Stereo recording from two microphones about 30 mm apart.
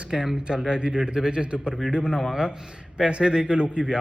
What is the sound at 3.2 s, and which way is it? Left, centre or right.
Speech, right.